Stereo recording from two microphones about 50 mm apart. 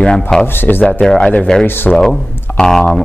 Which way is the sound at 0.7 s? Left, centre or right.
Left.